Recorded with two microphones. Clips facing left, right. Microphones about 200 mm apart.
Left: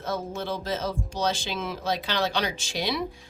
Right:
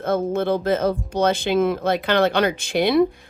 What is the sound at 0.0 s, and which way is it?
Speech, 55° right (ahead or behind).